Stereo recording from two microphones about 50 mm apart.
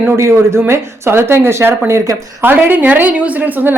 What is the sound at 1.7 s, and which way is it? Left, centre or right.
Speech, right.